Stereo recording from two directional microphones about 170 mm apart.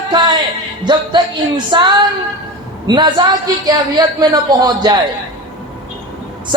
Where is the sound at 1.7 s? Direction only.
25° right (ahead or behind).